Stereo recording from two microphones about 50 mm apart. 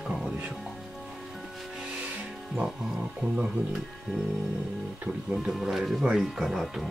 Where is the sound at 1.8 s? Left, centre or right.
Right.